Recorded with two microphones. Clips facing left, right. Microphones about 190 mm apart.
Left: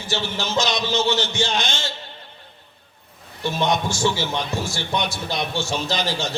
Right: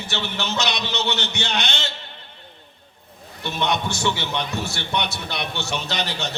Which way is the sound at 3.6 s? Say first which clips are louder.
Left 2 dB; 65° right (ahead or behind).